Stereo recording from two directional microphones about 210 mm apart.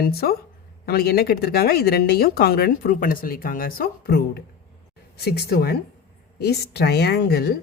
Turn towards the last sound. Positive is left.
turn(degrees=50)  # may be behind; listen again after turning